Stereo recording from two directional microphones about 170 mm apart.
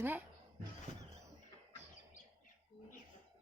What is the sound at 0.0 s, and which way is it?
Speech, 10° right (ahead or behind).